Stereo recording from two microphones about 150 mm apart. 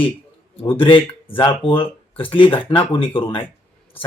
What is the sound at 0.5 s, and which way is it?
Speech, 35° left (ahead or behind).